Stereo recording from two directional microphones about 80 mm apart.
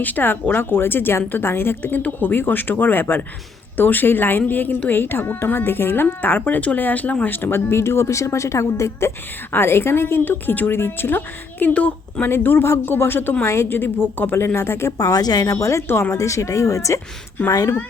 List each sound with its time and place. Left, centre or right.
0.0 s a woman's voice: left
11.6 s a woman's voice: centre; by 14.9 s left
14.9 s speech: left
15.9 s a woman's voice: left
16.1 s speech: left